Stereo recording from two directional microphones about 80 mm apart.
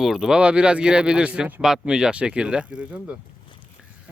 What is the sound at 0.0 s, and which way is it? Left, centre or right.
Speech, centre.